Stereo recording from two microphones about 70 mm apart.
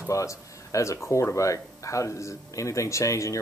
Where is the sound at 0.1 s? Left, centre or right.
Left.